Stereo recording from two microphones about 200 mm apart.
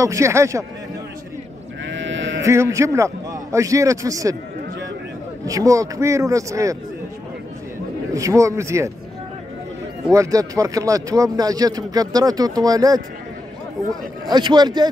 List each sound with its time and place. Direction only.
0.0 s a man's voice: 15° right (ahead or behind)
1.9 s sheep: 65° right (ahead or behind)
2.4 s a man's voice: 15° right (ahead or behind)
5.4 s a man's voice: 15° right (ahead or behind)
8.1 s a man's voice: 15° right (ahead or behind)
10.1 s speech: 15° right (ahead or behind)
13.8 s a man's voice: centre (ahead or behind)
14.3 s speech: 20° right (ahead or behind)